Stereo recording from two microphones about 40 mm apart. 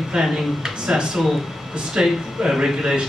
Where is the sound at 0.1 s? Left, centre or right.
Centre.